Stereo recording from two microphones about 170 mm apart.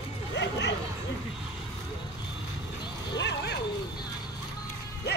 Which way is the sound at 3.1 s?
90° left.